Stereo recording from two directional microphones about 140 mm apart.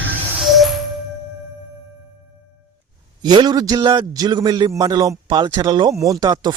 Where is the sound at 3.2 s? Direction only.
30° right (ahead or behind).